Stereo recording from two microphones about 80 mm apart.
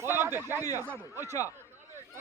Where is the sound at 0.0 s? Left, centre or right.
Right.